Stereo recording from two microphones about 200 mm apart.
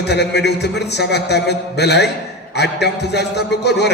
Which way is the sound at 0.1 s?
55° left (ahead or behind).